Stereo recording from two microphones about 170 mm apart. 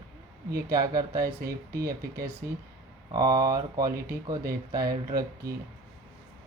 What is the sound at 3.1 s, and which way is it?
Speech, 20° right (ahead or behind).